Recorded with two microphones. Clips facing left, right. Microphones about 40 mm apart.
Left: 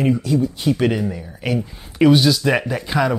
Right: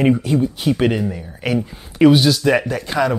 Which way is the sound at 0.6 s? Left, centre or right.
Centre.